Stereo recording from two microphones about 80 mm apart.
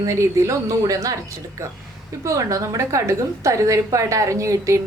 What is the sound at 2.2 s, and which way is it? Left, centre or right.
A woman's voice, right.